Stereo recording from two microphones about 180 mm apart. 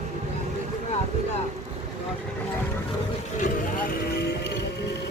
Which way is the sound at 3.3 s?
50° left (ahead or behind).